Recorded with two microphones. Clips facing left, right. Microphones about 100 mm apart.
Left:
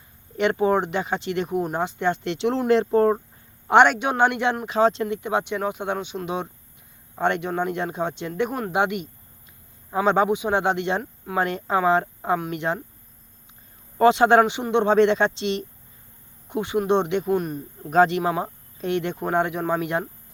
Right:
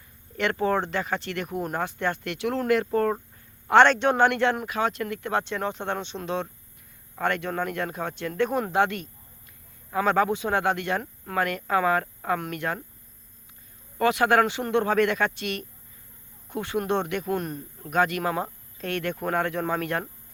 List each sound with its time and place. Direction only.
0.3 s speech: 20° left (ahead or behind)
3.7 s speech: 15° left (ahead or behind)
4.6 s speech: 25° left (ahead or behind)
14.0 s speech: 25° left (ahead or behind)
17.3 s a man's voice: 5° left (ahead or behind)
17.8 s speech: 25° left (ahead or behind)
18.2 s speech: 15° left (ahead or behind)